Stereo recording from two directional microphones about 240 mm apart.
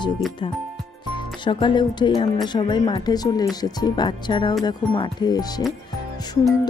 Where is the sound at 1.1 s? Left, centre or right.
Centre.